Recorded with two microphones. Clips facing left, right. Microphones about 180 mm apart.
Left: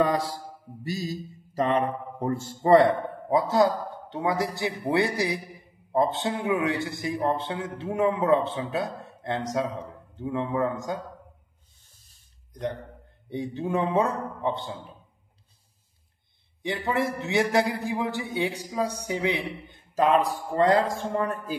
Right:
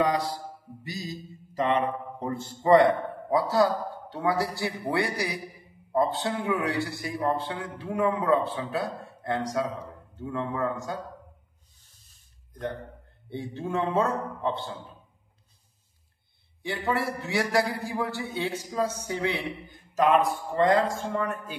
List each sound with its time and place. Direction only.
1.6 s speech: 45° left (ahead or behind)
2.8 s a man's voice: 20° left (ahead or behind)
13.3 s a man's voice: 15° left (ahead or behind)
16.6 s a man's voice: 20° left (ahead or behind)
19.9 s a man's voice: 30° left (ahead or behind)